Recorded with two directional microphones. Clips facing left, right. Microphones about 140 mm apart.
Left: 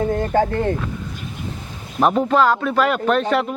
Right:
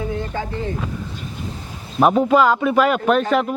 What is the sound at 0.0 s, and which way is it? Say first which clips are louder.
Speech: left 7 dB; 50° left (ahead or behind).